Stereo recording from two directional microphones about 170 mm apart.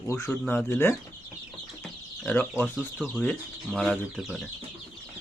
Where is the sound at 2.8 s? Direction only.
Centre (ahead or behind).